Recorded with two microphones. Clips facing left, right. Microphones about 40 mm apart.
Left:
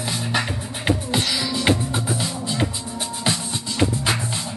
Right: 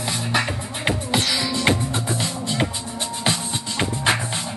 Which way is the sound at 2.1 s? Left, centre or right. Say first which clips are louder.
Right 1 dB; right.